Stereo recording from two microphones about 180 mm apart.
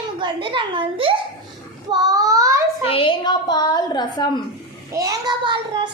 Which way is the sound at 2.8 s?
30° left (ahead or behind).